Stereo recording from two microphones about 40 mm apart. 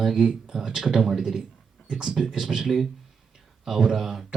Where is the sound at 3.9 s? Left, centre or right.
Centre.